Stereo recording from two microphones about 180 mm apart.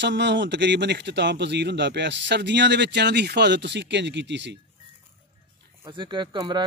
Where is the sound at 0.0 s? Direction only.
80° right.